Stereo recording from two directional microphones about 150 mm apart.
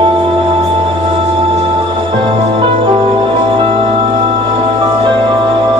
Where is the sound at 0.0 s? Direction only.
35° right (ahead or behind).